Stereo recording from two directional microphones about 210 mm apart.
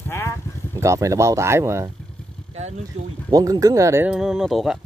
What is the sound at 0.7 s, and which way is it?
Speech, 15° right (ahead or behind).